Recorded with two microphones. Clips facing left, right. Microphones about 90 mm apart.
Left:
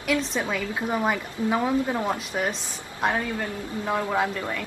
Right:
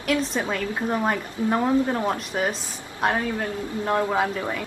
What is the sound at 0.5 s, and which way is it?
A woman's voice, centre (ahead or behind).